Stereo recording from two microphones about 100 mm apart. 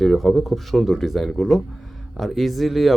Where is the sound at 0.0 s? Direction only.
Centre (ahead or behind).